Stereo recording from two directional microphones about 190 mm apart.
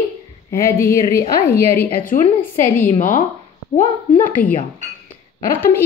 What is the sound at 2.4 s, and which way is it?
A woman's voice, 45° left (ahead or behind).